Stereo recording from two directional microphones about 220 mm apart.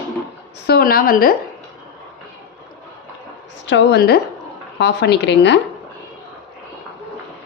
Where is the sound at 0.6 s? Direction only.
45° left (ahead or behind).